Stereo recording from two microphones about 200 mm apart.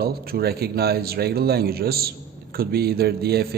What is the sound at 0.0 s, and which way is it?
A man's voice, 50° right (ahead or behind).